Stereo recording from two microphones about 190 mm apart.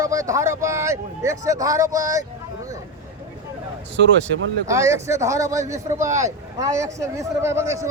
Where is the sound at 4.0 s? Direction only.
70° right (ahead or behind).